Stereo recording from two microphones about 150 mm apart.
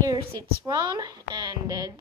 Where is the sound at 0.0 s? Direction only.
25° right (ahead or behind).